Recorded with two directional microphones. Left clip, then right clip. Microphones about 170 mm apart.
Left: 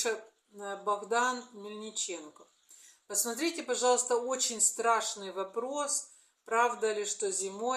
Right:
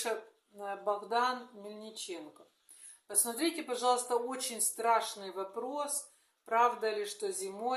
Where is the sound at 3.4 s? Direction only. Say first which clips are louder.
Left 2 dB; 15° right (ahead or behind).